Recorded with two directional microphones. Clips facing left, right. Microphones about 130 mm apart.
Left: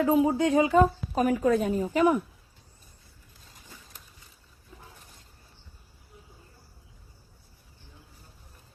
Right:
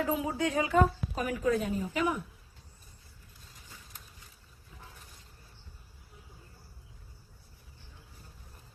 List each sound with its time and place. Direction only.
0.0 s speech: 30° left (ahead or behind)
1.2 s a woman's voice: 45° left (ahead or behind)